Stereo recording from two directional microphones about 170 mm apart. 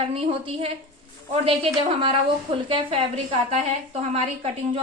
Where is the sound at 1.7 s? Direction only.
30° right (ahead or behind).